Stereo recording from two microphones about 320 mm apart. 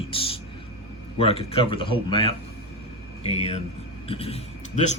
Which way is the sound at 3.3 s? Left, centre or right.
Centre.